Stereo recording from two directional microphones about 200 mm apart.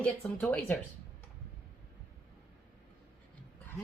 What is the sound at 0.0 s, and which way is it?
Speech, 5° left (ahead or behind).